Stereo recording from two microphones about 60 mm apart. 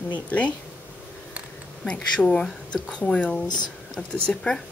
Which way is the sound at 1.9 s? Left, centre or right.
Centre.